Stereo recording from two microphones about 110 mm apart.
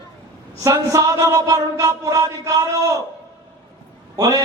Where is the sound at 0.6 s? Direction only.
30° right (ahead or behind).